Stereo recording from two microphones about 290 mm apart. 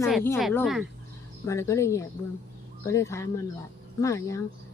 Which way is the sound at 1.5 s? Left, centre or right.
Centre.